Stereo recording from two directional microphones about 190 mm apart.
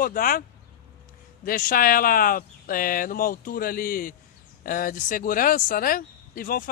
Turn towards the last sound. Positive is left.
turn(degrees=50)  # may be behind; listen again after turning